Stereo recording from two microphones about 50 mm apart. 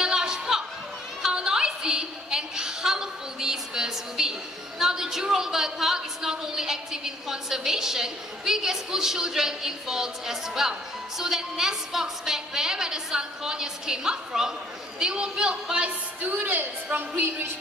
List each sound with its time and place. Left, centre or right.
0.0 s music: centre
1.2 s a woman's voice: centre
16.2 s a woman's voice: right